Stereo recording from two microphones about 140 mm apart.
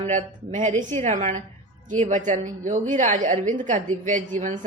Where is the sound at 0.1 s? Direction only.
60° right (ahead or behind).